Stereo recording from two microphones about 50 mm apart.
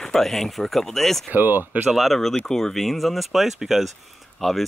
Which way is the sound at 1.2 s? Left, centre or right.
Right.